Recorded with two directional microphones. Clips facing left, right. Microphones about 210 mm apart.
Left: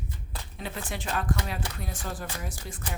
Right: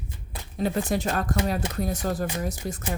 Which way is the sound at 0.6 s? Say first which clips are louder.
Right 11 dB; 40° right (ahead or behind).